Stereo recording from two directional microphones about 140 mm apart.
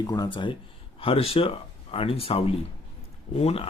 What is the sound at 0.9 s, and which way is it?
Speech, 45° left (ahead or behind).